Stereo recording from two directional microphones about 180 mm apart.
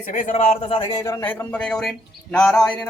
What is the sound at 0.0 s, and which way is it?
Speech, 45° left (ahead or behind).